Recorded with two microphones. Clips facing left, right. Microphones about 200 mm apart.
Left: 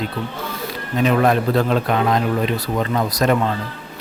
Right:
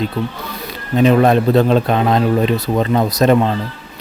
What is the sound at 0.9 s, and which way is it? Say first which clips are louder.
A man's voice: right 5 dB; 25° right (ahead or behind).